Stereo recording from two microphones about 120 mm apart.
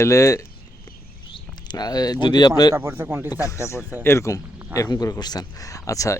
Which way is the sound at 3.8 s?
15° right (ahead or behind).